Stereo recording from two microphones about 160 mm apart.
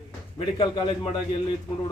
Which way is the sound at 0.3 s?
30° left (ahead or behind).